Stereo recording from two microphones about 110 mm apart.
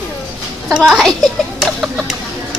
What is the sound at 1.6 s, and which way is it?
Chicken, 5° right (ahead or behind).